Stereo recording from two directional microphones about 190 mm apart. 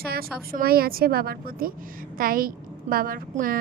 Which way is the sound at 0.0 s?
55° right (ahead or behind).